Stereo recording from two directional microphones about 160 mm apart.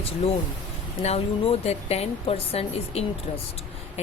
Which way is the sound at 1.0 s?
40° left (ahead or behind).